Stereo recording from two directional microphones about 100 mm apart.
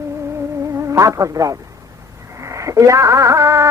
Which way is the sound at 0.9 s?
35° right (ahead or behind).